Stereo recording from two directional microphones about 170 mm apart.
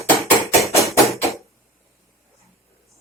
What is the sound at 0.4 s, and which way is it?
Hammer, 20° left (ahead or behind).